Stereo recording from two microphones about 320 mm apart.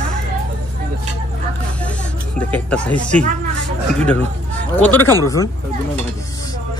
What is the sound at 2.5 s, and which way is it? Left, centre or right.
Speech, centre.